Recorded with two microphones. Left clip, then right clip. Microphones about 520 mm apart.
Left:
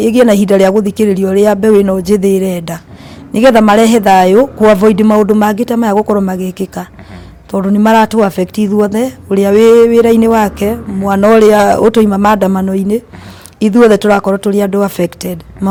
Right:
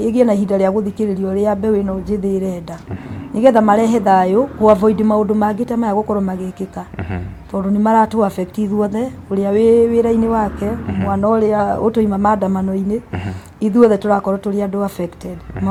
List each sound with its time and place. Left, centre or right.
0.0 s speech: left